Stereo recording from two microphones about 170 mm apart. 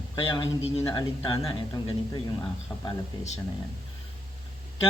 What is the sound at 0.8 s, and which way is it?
Speech, 25° left (ahead or behind).